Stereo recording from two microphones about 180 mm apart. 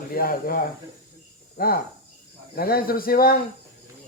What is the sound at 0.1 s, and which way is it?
Speech, 55° left (ahead or behind).